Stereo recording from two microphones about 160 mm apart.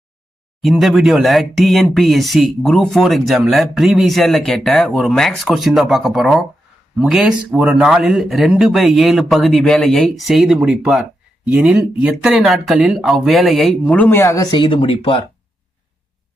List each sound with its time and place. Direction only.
0.6 s speech: centre (ahead or behind); by 14.4 s 15° left (ahead or behind)
14.5 s speech: 30° left (ahead or behind)